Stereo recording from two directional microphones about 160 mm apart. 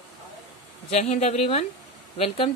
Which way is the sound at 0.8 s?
40° left (ahead or behind).